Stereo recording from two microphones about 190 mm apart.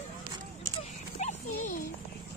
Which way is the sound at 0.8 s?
40° left (ahead or behind).